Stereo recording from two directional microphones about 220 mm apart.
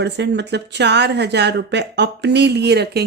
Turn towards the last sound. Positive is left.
turn(degrees=-50)  # may be behind; listen again after turning